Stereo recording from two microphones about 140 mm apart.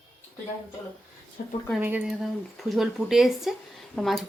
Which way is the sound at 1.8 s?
10° right (ahead or behind).